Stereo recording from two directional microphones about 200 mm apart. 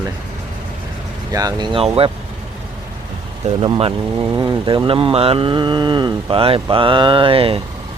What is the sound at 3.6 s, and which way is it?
Speech, 25° right (ahead or behind).